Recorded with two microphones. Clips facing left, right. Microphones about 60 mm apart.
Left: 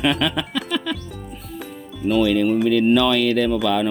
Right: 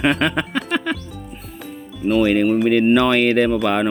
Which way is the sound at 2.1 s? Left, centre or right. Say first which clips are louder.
Right 2 dB; right.